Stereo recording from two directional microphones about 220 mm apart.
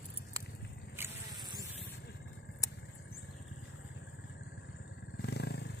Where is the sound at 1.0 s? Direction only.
15° right (ahead or behind).